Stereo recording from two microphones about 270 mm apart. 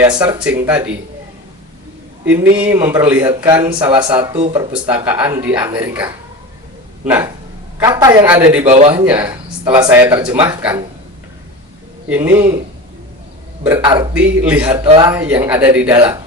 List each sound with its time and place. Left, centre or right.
0.0 s speech: centre
2.6 s speech: centre
4.7 s speech: centre
8.6 s a man's voice: right
8.9 s speech: centre
12.0 s speech: centre
13.7 s speech: centre
14.1 s speech: centre
14.8 s a man's voice: centre
15.1 s speech: centre